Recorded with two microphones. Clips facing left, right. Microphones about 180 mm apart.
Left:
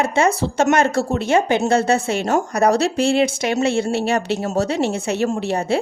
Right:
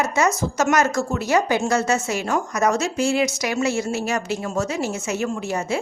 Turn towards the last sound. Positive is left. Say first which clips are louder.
# left 4 dB
turn(degrees=35)  # may be behind; listen again after turning